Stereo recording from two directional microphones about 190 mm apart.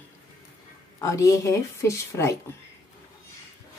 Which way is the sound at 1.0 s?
15° left (ahead or behind).